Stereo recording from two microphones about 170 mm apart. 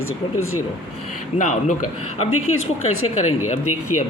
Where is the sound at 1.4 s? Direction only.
50° left (ahead or behind).